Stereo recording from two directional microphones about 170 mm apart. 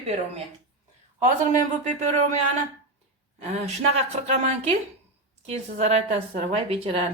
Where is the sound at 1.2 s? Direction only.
45° right (ahead or behind).